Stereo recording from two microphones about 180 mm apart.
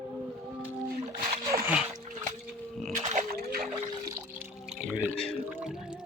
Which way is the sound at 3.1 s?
50° right (ahead or behind).